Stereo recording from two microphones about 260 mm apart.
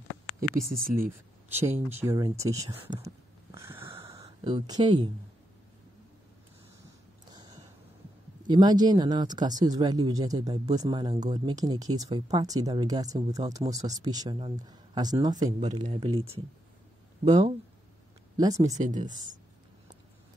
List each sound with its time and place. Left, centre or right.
0.6 s speech: right
2.0 s speech: centre
3.5 s a sound: centre
7.3 s a sound: centre
8.5 s speech: centre
18.8 s speech: right